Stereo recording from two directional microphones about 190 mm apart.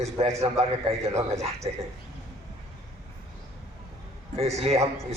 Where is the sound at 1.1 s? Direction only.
15° right (ahead or behind).